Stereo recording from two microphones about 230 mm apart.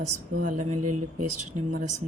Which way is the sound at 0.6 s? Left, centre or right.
Right.